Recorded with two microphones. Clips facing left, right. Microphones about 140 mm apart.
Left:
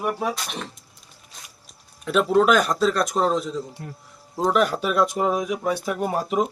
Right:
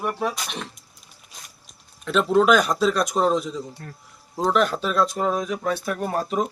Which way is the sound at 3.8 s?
15° left (ahead or behind).